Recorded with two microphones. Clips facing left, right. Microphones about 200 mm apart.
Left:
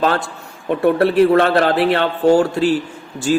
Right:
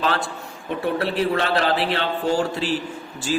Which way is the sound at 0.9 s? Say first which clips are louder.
Left 10 dB; 55° left (ahead or behind).